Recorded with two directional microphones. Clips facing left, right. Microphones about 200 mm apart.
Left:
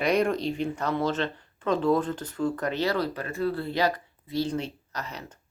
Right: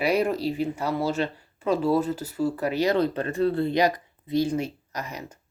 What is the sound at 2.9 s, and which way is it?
Speech, 25° right (ahead or behind).